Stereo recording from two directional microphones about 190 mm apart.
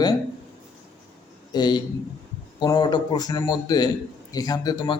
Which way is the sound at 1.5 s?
20° left (ahead or behind).